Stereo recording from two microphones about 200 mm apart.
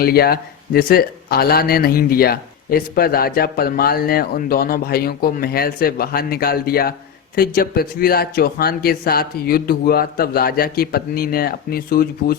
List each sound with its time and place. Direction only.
0.0 s a man's voice: 50° left (ahead or behind)